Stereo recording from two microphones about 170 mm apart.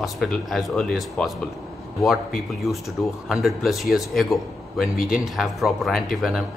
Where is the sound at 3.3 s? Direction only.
Centre (ahead or behind).